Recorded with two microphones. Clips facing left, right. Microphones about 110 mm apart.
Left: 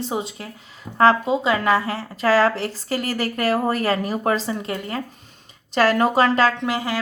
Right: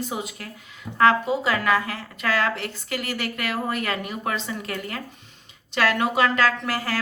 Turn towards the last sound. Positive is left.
turn(degrees=20)  # may be behind; listen again after turning